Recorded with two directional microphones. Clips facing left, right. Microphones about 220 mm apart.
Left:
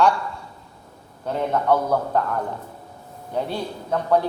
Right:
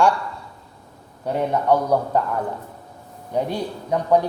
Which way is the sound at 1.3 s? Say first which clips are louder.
Right 1 dB; 15° right (ahead or behind).